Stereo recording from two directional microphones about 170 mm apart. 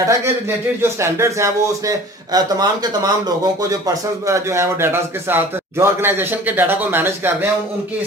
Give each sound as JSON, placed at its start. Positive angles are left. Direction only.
{"t": 0.1, "sound": "speech", "side_deg": -15}